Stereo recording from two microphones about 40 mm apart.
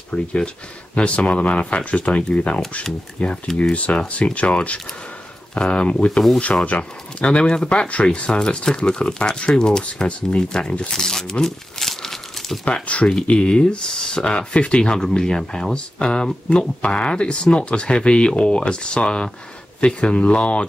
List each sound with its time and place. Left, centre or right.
0.1 s speech: left
8.3 s speech: left
10.9 s crumpling: centre
12.6 s speech: left